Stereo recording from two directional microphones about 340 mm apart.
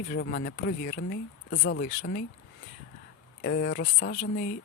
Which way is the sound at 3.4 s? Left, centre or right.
Left.